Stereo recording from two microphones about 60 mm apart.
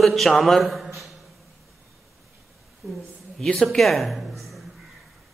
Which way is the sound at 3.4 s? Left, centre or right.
Centre.